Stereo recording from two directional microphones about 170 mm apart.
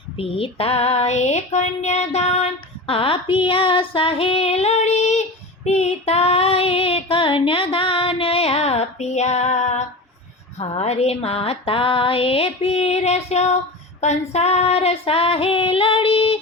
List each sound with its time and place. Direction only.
0.2 s female singing: 35° left (ahead or behind)